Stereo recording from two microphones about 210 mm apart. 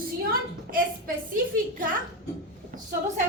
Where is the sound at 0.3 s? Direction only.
45° right (ahead or behind).